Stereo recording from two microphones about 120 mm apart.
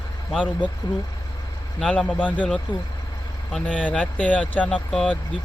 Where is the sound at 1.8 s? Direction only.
5° left (ahead or behind).